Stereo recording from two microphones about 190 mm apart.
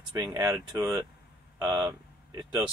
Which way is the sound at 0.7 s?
10° right (ahead or behind).